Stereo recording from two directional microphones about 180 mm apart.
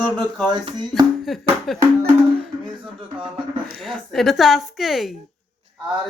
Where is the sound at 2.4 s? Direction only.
Centre (ahead or behind).